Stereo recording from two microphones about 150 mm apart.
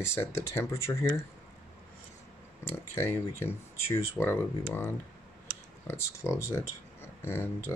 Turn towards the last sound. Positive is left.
turn(degrees=15)  # may be behind; listen again after turning